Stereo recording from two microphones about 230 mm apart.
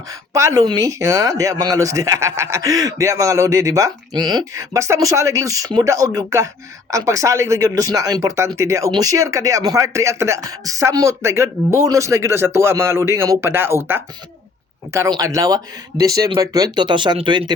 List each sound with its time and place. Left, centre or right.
0.1 s speech: centre